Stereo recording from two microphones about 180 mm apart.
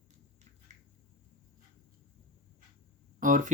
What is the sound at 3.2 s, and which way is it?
Speech, 50° right (ahead or behind).